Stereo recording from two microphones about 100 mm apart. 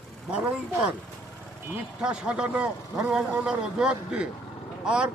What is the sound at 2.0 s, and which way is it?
Speech, 10° right (ahead or behind).